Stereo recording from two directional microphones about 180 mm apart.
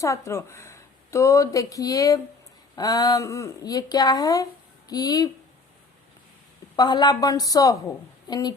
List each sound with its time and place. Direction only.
0.0 s speech: 15° left (ahead or behind)
6.7 s speech: 25° left (ahead or behind)